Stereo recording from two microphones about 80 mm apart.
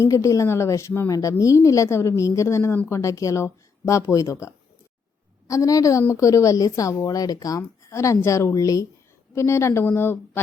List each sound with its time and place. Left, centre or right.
0.0 s speech: left